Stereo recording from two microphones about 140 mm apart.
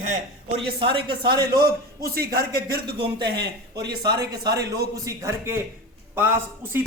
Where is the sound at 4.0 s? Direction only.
30° right (ahead or behind).